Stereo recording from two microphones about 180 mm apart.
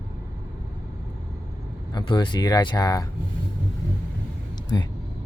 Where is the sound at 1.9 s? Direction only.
25° left (ahead or behind).